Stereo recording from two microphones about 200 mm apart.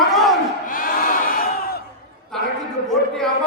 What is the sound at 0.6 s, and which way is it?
Crowd, 45° left (ahead or behind).